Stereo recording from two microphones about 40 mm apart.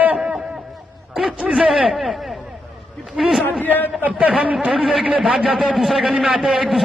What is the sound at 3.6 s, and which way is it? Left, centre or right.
Speech, left.